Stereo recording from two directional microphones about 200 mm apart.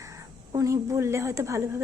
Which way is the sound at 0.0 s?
15° right (ahead or behind).